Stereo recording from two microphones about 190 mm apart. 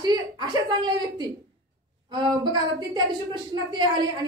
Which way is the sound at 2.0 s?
25° right (ahead or behind).